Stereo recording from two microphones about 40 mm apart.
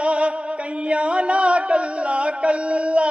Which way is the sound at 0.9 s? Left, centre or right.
Right.